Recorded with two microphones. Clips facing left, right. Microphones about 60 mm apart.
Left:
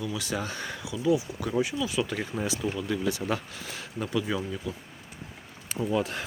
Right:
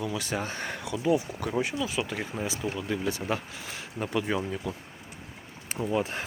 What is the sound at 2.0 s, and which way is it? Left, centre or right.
Speech, right.